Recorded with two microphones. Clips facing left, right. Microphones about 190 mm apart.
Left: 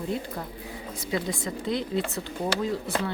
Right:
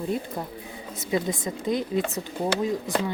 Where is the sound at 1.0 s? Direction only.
20° right (ahead or behind).